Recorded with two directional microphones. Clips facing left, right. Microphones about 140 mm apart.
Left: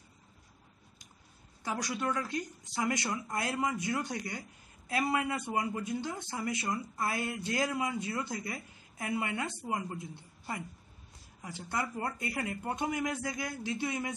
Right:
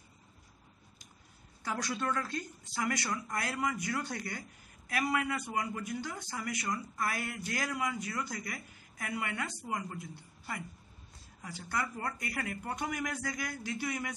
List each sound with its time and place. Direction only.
1.6 s speech: 15° left (ahead or behind)